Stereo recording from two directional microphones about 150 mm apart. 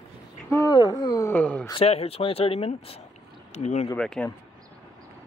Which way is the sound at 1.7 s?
40° left (ahead or behind).